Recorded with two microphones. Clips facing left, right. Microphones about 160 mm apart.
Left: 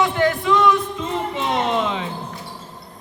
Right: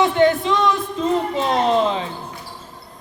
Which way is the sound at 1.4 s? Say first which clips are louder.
Right 2 dB; 35° right (ahead or behind).